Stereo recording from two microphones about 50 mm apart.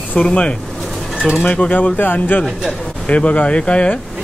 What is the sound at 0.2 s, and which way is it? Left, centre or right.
Speech, left.